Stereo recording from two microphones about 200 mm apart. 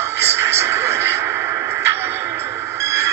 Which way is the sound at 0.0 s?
15° right (ahead or behind).